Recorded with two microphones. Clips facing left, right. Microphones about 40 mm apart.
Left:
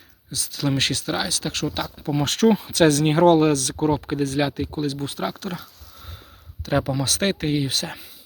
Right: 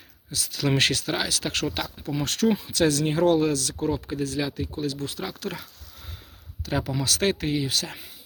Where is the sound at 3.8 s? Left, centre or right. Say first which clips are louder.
Left 5 dB; left.